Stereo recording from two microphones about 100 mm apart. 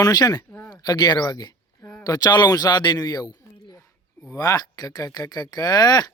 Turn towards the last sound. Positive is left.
turn(degrees=40)  # may be behind; listen again after turning